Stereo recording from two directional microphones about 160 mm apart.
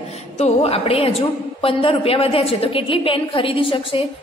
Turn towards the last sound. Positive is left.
turn(degrees=35)  # may be behind; listen again after turning